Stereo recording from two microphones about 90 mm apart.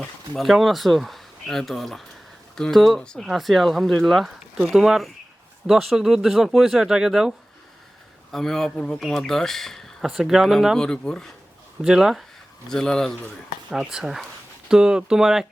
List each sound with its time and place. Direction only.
0.3 s speech: centre (ahead or behind)
11.8 s speech: 5° right (ahead or behind)
12.6 s speech: 5° left (ahead or behind)
13.7 s speech: 5° right (ahead or behind)